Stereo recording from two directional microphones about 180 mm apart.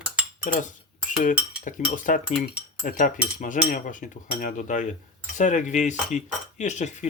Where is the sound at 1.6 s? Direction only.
45° left (ahead or behind).